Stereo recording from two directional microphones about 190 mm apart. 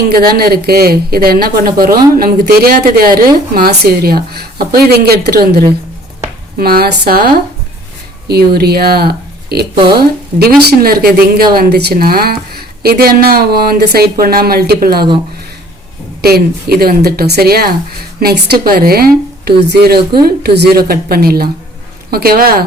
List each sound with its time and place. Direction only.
0.1 s speech: 50° right (ahead or behind)
16.2 s speech: 55° right (ahead or behind)